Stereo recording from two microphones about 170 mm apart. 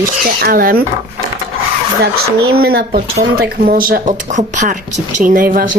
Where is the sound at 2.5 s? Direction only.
65° right (ahead or behind).